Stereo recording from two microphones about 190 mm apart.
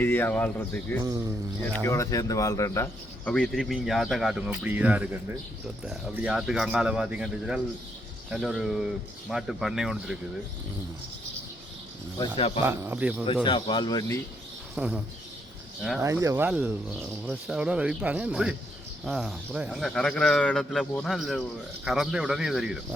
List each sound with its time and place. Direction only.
0.0 s speech: 10° left (ahead or behind)
12.6 s speech: 10° right (ahead or behind)
13.2 s speech: 25° left (ahead or behind)
14.8 s speech: 5° right (ahead or behind)
16.0 s speech: 15° right (ahead or behind)